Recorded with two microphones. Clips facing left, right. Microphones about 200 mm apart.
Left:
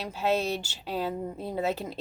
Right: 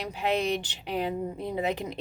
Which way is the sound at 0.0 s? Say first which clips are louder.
Even; 15° right (ahead or behind).